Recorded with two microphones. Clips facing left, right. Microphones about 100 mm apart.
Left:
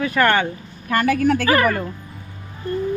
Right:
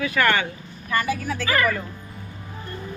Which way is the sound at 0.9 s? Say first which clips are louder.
Left 7 dB; 70° left (ahead or behind).